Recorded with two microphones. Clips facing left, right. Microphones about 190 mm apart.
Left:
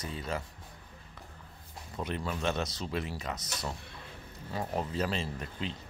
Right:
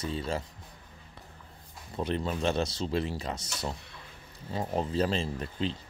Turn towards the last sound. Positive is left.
turn(degrees=-30)  # may be behind; listen again after turning